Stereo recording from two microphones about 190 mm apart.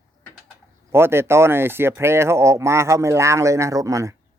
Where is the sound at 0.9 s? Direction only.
10° right (ahead or behind).